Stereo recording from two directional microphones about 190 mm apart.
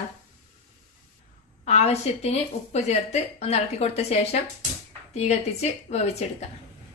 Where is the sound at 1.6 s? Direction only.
35° left (ahead or behind).